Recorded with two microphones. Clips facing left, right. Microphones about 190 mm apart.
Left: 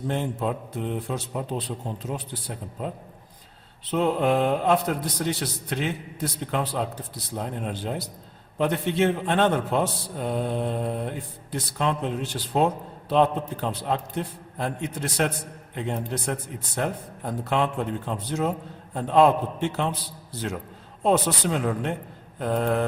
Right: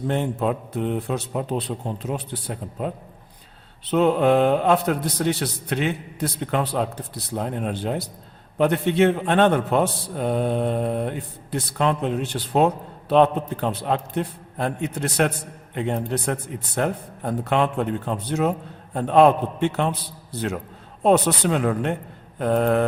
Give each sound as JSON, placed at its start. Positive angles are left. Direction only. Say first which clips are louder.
{"t": 0.1, "sound": "a man's voice", "louder": "right 4 dB", "side_deg": -65}
{"t": 3.9, "sound": "a man's voice", "louder": "right 5 dB", "side_deg": -70}